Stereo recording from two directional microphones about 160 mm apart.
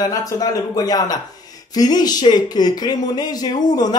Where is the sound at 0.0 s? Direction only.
20° left (ahead or behind).